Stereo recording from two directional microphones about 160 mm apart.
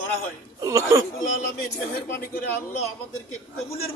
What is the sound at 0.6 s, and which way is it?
Speech, 20° right (ahead or behind).